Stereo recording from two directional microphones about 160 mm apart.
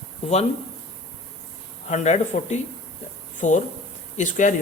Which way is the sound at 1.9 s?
45° left (ahead or behind).